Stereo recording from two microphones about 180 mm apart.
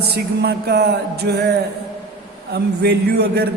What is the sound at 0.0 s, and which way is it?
A man's voice, 65° right (ahead or behind).